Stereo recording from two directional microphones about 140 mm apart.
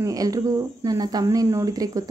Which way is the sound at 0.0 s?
25° right (ahead or behind).